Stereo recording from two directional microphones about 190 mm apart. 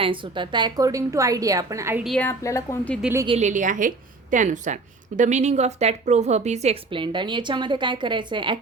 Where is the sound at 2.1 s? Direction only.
10° left (ahead or behind).